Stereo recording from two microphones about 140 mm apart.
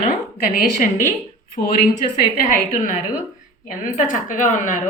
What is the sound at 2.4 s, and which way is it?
A woman's voice, 75° left (ahead or behind).